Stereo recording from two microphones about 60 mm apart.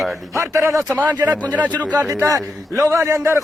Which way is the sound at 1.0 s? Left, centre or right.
Right.